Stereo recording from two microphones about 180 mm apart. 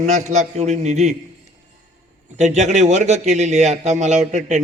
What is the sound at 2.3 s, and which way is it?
A man's voice, 40° right (ahead or behind).